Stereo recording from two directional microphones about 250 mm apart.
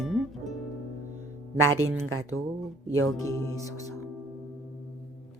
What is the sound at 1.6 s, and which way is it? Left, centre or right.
Speech, right.